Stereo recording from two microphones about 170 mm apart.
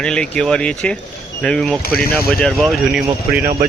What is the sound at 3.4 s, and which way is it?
Speech, 60° right (ahead or behind).